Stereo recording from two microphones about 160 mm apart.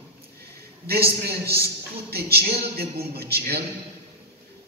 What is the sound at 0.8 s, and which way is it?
A man's voice, 75° right (ahead or behind).